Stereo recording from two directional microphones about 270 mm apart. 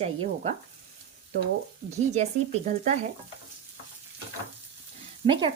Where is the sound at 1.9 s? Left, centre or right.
Right.